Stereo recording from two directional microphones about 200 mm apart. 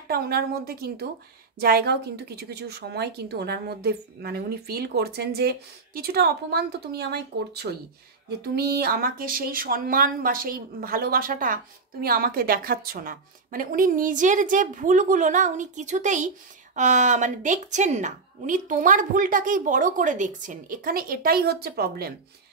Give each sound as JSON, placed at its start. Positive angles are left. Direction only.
{"t": 0.1, "sound": "a woman's voice", "side_deg": -50}